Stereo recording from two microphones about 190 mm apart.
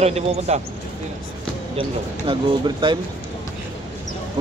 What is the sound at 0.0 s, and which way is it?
Speech, 35° right (ahead or behind).